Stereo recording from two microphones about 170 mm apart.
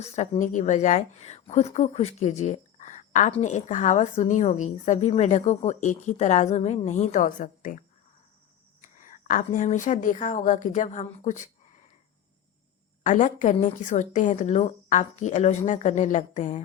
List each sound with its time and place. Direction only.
0.0 s a woman's voice: 45° left (ahead or behind)
8.8 s a woman's voice: 50° left (ahead or behind)
13.0 s a woman's voice: 45° left (ahead or behind)